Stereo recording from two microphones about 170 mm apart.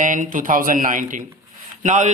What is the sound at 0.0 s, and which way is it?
A man's voice, 50° right (ahead or behind).